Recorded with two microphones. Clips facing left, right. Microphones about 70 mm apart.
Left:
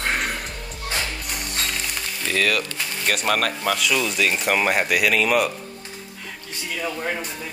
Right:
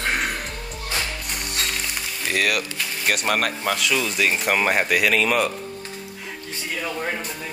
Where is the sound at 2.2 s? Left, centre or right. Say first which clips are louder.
Left 1 dB; centre.